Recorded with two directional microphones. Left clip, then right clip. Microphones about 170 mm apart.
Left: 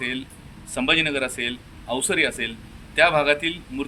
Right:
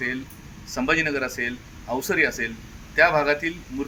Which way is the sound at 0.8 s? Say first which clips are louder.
Left 2 dB; 40° left (ahead or behind).